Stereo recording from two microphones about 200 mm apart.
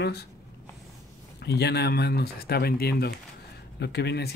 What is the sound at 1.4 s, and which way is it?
Speech, 55° left (ahead or behind).